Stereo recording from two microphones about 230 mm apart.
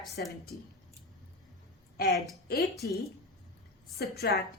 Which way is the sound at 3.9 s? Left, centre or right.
Left.